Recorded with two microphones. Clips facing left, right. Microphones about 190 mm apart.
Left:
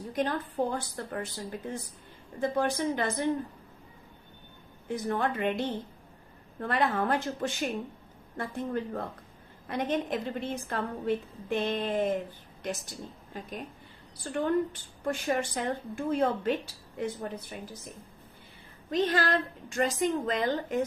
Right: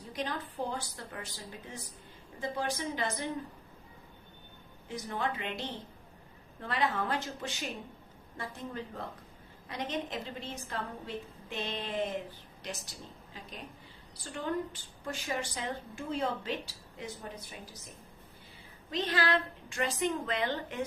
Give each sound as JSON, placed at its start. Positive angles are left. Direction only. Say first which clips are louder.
{"t": 0.1, "sound": "a woman's voice", "louder": "left 6 dB", "side_deg": 50}
{"t": 4.9, "sound": "a woman's voice", "louder": "left 6 dB", "side_deg": 55}
{"t": 18.9, "sound": "a woman's voice", "louder": "left 4 dB", "side_deg": 50}